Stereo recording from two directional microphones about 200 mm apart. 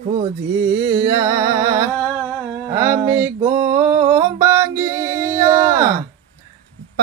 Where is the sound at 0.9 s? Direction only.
15° right (ahead or behind).